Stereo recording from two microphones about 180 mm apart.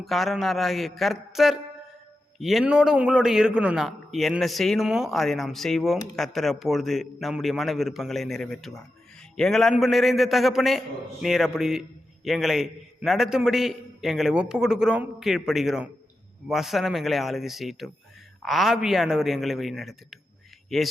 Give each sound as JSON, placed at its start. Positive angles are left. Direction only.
{"t": 0.0, "sound": "a man's voice", "side_deg": 0}